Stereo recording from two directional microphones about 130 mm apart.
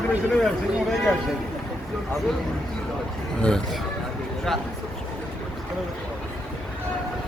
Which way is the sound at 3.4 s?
5° left (ahead or behind).